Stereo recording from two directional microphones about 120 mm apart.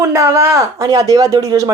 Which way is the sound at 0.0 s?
25° right (ahead or behind).